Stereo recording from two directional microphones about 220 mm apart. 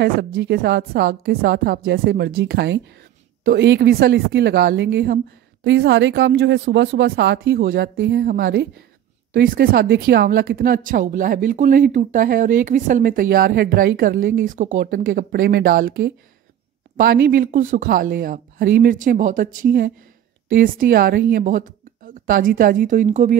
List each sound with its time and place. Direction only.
0.0 s speech: 45° right (ahead or behind)